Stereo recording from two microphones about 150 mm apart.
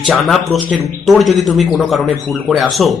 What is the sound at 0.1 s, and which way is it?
Speech, centre (ahead or behind).